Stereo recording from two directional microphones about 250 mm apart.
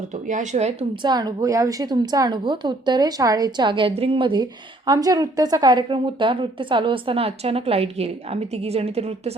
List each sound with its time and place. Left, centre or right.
0.1 s a woman's voice: right